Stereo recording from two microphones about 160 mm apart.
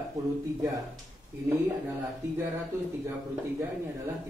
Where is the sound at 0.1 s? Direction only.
20° right (ahead or behind).